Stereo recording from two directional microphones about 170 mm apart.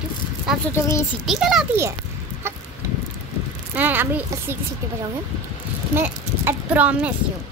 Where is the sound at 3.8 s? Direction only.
10° right (ahead or behind).